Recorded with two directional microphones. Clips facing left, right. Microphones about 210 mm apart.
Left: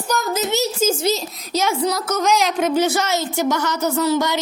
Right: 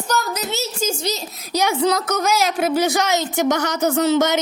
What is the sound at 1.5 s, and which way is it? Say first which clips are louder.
Speech: right 2 dB; 15° right (ahead or behind).